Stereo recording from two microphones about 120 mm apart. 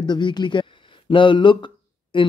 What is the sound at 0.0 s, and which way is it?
Speech, 40° left (ahead or behind).